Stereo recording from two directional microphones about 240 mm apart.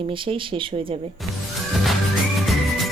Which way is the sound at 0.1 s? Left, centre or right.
Right.